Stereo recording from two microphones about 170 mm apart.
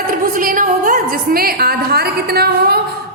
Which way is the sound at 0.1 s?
55° right (ahead or behind).